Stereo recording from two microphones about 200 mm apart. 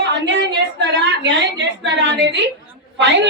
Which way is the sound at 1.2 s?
60° right (ahead or behind).